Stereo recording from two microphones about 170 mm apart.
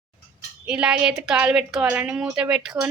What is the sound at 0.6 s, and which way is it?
A woman's voice, 5° right (ahead or behind).